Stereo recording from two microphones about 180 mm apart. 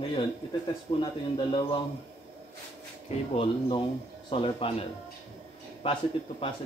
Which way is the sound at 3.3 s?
30° left (ahead or behind).